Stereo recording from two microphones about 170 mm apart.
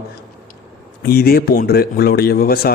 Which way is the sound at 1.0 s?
65° left (ahead or behind).